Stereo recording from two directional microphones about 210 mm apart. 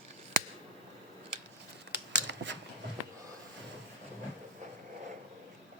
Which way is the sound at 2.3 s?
60° right (ahead or behind).